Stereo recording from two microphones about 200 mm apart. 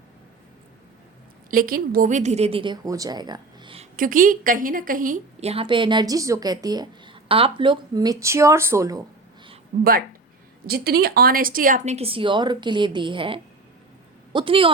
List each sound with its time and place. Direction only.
1.5 s a woman's voice: 45° right (ahead or behind); by 3.8 s 25° right (ahead or behind)
3.9 s a woman's voice: 45° right (ahead or behind); by 9.0 s 15° right (ahead or behind)
9.7 s speech: 40° right (ahead or behind)
10.7 s a woman's voice: 50° right (ahead or behind); by 14.7 s 25° right (ahead or behind)